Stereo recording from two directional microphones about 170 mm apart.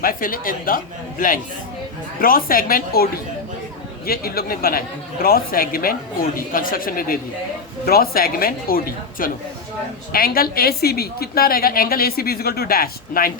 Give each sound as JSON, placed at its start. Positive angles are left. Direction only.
{"t": 0.0, "sound": "a woman's voice", "side_deg": 55}
{"t": 2.1, "sound": "a woman's voice", "side_deg": 55}